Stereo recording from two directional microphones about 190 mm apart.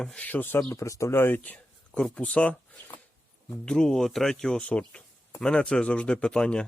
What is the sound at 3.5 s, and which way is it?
Speech, 5° left (ahead or behind).